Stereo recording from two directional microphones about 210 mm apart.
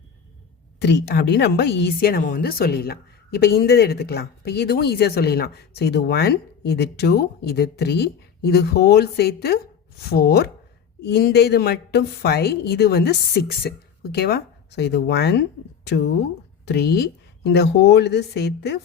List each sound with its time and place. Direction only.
0.8 s speech: 55° left (ahead or behind)